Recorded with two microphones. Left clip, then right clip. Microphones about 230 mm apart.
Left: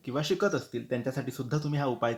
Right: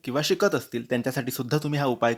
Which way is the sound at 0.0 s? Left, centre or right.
Right.